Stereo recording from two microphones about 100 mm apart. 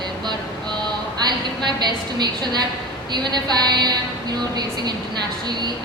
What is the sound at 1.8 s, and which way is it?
A woman's voice, 45° right (ahead or behind).